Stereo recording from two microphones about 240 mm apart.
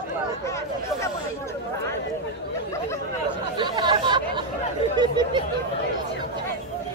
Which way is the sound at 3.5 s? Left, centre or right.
Centre.